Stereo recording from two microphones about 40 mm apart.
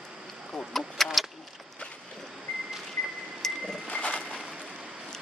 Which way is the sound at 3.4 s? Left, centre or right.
Centre.